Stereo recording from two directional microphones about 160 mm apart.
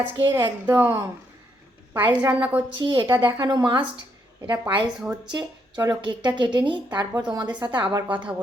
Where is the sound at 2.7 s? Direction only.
30° right (ahead or behind).